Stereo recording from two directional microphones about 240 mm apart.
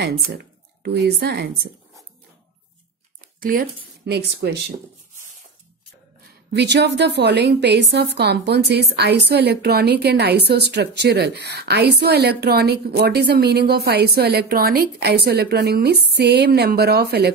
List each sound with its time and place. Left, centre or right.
0.0 s speech: right
3.2 s speech: right
6.5 s a woman's voice: right